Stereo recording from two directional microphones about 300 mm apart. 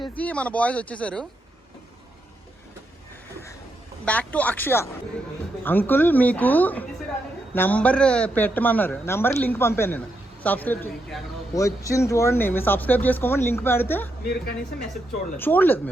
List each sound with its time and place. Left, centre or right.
0.2 s a man's voice: centre
4.0 s a man's voice: centre
15.4 s speech: centre